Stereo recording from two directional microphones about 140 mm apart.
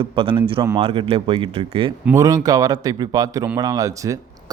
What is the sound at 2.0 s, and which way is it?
Speech, 20° right (ahead or behind).